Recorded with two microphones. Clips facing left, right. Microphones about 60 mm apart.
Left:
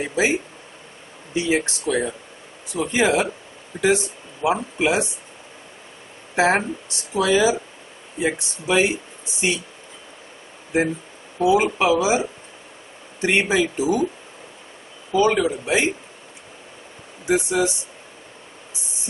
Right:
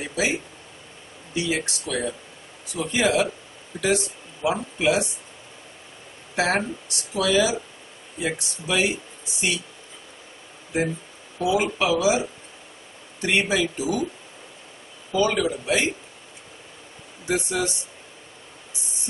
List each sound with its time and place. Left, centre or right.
0.0 s speech: left
1.3 s speech: left
6.3 s speech: left
11.3 s speech: left
15.1 s speech: left
17.3 s speech: centre